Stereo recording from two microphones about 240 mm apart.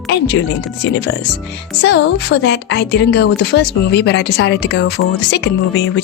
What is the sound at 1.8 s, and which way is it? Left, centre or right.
Speech, left.